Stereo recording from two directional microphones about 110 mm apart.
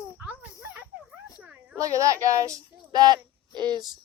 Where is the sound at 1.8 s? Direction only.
30° right (ahead or behind).